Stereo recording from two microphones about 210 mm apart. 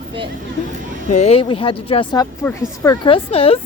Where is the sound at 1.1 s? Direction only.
30° left (ahead or behind).